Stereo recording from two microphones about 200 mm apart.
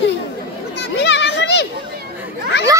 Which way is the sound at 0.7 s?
60° left (ahead or behind).